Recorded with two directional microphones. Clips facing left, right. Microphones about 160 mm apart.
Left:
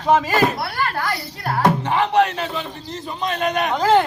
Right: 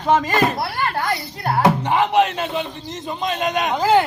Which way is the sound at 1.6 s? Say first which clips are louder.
Even; 20° right (ahead or behind).